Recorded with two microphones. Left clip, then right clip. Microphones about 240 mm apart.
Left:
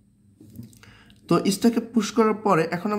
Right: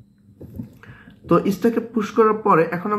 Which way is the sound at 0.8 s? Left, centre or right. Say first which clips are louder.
Right 4 dB; left.